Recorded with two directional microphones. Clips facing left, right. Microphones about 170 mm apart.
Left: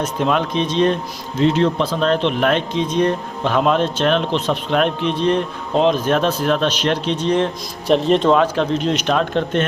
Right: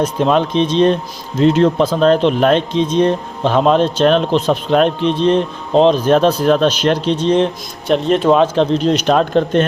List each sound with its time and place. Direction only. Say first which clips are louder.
0.0 s speech: right 5 dB; 30° right (ahead or behind)
1.4 s speech: right 4 dB; 40° right (ahead or behind); by 7.5 s 25° right (ahead or behind)
7.9 s speech: right 1 dB; centre (ahead or behind)
8.3 s speech: right 4 dB; 25° right (ahead or behind)